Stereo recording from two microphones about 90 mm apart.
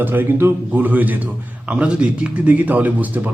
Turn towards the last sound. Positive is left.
turn(degrees=-20)  # may be behind; listen again after turning